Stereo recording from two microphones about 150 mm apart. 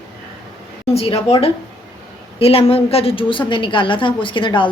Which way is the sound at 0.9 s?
40° left (ahead or behind).